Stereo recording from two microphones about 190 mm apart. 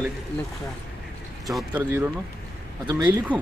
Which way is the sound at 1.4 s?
Centre (ahead or behind).